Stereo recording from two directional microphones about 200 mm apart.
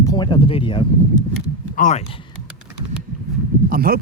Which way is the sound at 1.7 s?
40° left (ahead or behind).